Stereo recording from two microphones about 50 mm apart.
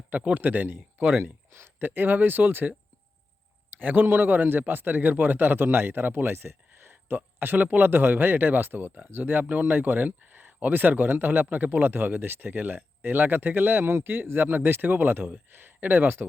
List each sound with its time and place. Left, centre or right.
0.1 s a man's voice: right
0.4 s speech: right
1.2 s speech: right
1.8 s speech: right
3.8 s a man's voice: right
7.3 s speech: right